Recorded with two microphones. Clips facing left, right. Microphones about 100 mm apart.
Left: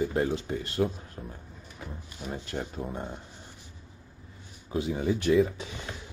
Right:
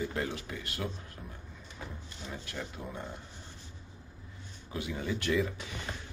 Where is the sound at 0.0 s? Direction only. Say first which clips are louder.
Left 7 dB; 30° left (ahead or behind).